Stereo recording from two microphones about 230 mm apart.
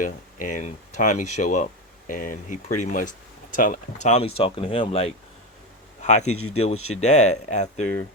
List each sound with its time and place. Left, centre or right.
0.0 s speech: left
6.0 s a sound: left
6.2 s speech: left
6.9 s speech: left